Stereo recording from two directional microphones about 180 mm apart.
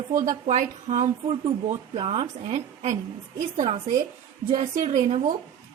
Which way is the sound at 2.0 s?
30° right (ahead or behind).